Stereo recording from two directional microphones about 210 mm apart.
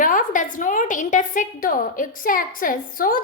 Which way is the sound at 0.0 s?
40° left (ahead or behind).